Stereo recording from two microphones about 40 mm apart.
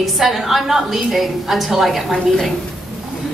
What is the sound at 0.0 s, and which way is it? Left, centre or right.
A woman's voice, centre.